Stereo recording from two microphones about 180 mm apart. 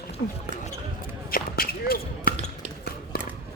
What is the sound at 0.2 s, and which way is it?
Speech, 50° left (ahead or behind).